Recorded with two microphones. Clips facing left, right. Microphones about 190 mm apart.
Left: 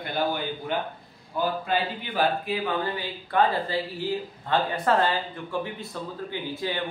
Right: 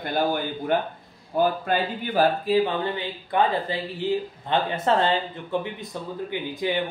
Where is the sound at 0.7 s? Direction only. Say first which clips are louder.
Right 5 dB; 50° right (ahead or behind).